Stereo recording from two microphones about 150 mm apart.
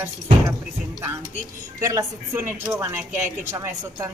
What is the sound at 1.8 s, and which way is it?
A woman's voice, 20° right (ahead or behind).